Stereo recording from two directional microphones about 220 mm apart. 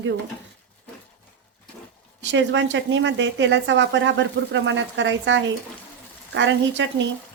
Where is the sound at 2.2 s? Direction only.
55° right (ahead or behind).